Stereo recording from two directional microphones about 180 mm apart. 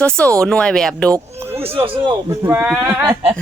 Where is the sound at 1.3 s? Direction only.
15° right (ahead or behind).